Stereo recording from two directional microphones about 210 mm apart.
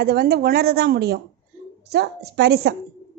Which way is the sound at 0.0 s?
50° right (ahead or behind).